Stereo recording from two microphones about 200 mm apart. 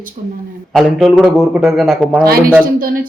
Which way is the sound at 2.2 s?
50° right (ahead or behind).